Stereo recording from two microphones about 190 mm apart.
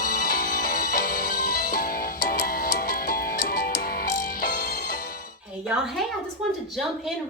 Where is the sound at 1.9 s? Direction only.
50° left (ahead or behind).